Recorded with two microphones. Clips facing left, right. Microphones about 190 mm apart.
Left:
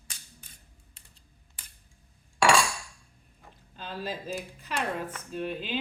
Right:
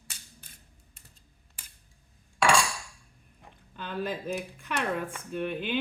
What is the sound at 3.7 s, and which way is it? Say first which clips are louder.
Speech: right 3 dB; 60° right (ahead or behind).